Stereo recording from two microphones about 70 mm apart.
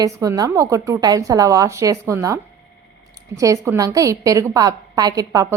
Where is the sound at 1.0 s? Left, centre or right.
Right.